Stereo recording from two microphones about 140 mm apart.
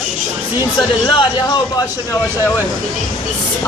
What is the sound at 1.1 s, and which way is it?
Speech, 35° left (ahead or behind).